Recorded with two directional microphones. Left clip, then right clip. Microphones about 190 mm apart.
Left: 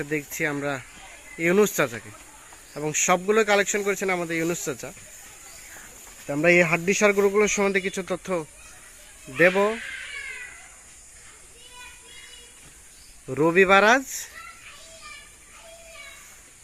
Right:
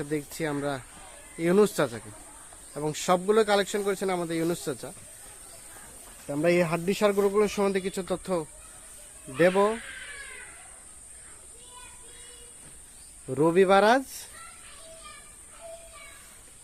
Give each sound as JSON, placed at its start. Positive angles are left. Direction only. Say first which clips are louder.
{"t": 0.0, "sound": "speech", "louder": "left 4 dB", "side_deg": 5}
{"t": 6.2, "sound": "speech", "louder": "left 5 dB", "side_deg": 20}
{"t": 13.2, "sound": "speech", "louder": "left 3 dB", "side_deg": 5}